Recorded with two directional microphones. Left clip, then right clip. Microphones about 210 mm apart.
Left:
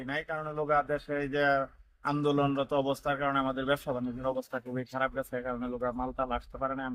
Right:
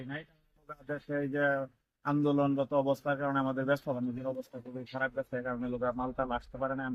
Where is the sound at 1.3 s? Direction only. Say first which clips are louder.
Left 4 dB; 25° left (ahead or behind).